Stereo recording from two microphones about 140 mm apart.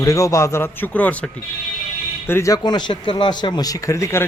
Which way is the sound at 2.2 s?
20° left (ahead or behind).